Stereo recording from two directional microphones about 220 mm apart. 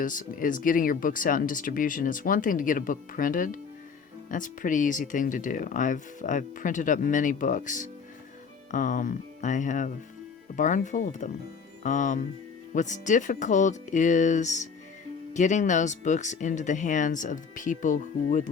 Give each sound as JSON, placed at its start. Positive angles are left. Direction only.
{"t": 0.0, "sound": "speech", "side_deg": 35}